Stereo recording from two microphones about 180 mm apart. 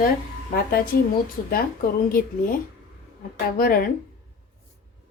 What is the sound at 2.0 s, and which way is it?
Speech, 55° left (ahead or behind).